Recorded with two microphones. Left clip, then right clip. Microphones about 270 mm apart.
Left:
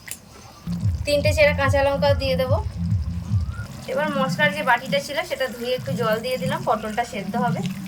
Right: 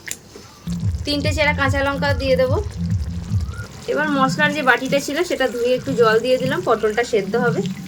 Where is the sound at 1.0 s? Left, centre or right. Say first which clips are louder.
Left 2 dB; centre.